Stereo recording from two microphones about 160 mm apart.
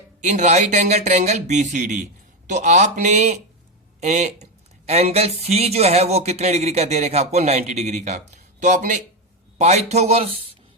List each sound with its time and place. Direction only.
0.2 s speech: 45° right (ahead or behind)